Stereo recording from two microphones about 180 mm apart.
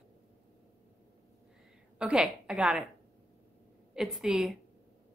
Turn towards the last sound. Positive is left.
turn(degrees=-5)  # may be behind; listen again after turning